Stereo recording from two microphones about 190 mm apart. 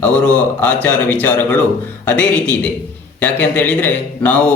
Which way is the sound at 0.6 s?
10° left (ahead or behind).